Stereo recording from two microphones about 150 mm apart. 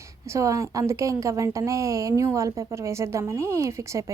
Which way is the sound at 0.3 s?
20° right (ahead or behind).